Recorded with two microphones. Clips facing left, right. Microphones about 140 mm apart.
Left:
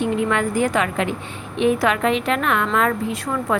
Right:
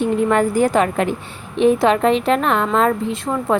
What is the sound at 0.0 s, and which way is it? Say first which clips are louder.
A woman's voice: right 4 dB; 40° right (ahead or behind).